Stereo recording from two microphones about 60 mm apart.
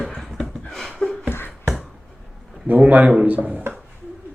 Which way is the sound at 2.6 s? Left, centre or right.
Right.